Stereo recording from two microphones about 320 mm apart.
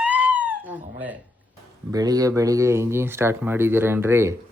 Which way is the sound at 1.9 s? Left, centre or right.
Centre.